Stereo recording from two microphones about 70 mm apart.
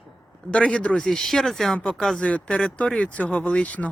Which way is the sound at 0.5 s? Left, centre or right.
Centre.